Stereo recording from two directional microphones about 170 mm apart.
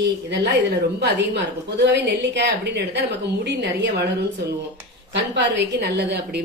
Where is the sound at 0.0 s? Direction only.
90° right.